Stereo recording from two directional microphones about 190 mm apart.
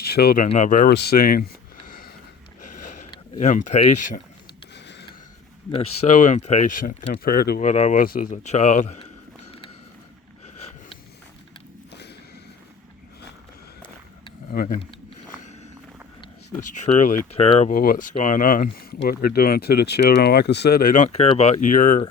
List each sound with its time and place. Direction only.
0.0 s speech: 55° left (ahead or behind)
0.4 s speech: 40° left (ahead or behind)
0.9 s speech: 55° left (ahead or behind)
1.9 s a sound: 50° left (ahead or behind)
3.4 s speech: 40° left (ahead or behind)
4.7 s a sound: 65° left (ahead or behind)
5.7 s speech: 30° left (ahead or behind); by 7.7 s 55° left (ahead or behind)
7.7 s speech: 40° left (ahead or behind)
14.5 s speech: 50° left (ahead or behind)
15.4 s walk: 35° left (ahead or behind)
16.6 s speech: 40° left (ahead or behind)
17.3 s speech: 30° left (ahead or behind)
17.7 s speech: 45° left (ahead or behind)